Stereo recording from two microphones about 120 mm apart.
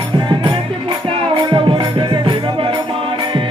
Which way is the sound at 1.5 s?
40° right (ahead or behind).